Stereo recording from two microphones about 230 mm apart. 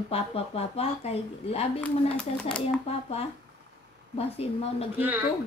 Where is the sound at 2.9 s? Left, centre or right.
Left.